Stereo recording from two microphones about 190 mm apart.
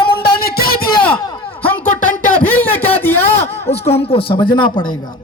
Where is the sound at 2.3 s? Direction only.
10° left (ahead or behind).